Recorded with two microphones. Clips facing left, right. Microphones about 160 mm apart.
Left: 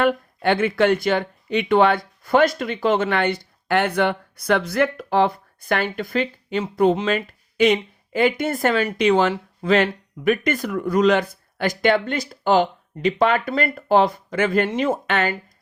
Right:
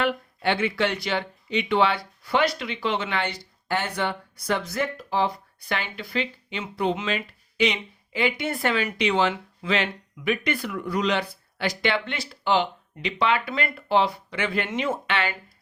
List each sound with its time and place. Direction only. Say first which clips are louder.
0.0 s speech: left 5 dB; 50° left (ahead or behind)